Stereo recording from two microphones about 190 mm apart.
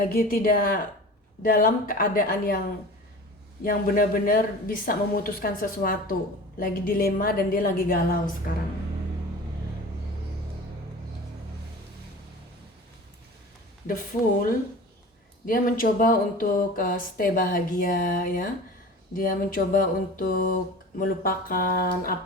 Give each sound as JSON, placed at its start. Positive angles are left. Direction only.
{"t": 0.0, "sound": "speech", "side_deg": 50}
{"t": 3.6, "sound": "speech", "side_deg": 50}
{"t": 13.8, "sound": "speech", "side_deg": 45}